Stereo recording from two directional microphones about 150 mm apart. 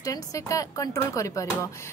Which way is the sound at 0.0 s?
25° left (ahead or behind).